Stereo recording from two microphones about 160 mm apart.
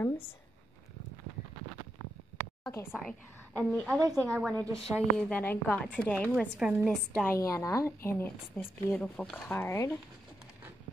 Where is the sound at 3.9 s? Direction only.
20° right (ahead or behind).